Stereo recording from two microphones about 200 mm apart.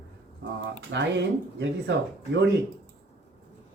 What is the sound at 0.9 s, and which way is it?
Speech, 60° right (ahead or behind).